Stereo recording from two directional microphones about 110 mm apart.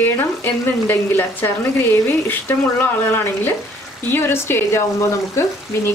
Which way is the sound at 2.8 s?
20° left (ahead or behind).